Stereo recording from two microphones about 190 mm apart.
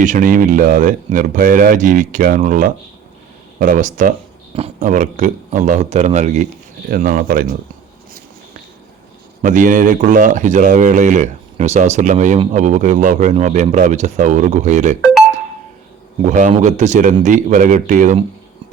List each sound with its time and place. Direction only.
0.0 s speech: 45° right (ahead or behind)
9.4 s speech: 45° right (ahead or behind)
16.2 s speech: 40° right (ahead or behind)